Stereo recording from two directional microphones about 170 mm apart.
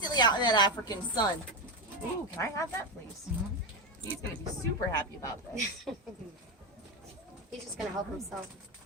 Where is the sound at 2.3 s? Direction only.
15° left (ahead or behind).